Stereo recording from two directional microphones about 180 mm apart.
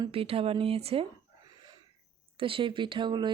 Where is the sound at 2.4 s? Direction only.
30° right (ahead or behind).